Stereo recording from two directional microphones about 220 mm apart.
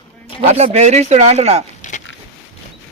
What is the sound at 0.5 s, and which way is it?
Speech, 30° right (ahead or behind).